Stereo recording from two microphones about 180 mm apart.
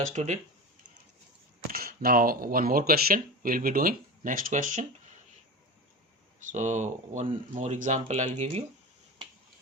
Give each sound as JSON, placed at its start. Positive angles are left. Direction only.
{"t": 0.1, "sound": "speech", "side_deg": -40}
{"t": 1.7, "sound": "speech", "side_deg": -55}
{"t": 6.4, "sound": "speech", "side_deg": -40}